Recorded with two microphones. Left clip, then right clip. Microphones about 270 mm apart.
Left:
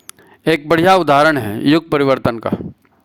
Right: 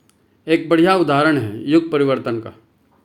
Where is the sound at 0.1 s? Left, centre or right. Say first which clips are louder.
Left 2 dB; left.